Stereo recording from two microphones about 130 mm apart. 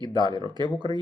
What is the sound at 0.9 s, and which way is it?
Speech, 30° left (ahead or behind).